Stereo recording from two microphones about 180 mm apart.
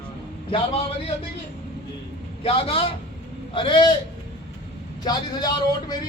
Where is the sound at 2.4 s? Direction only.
30° left (ahead or behind).